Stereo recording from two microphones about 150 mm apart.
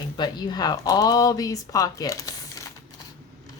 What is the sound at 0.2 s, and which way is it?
Speech, 30° left (ahead or behind).